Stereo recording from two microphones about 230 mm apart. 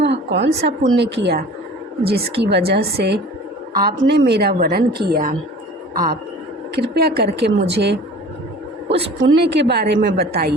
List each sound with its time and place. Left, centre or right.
0.0 s a woman's voice: right